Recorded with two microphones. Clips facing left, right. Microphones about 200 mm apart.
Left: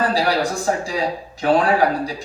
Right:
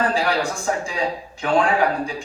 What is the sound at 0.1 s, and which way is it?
Speech, 35° left (ahead or behind).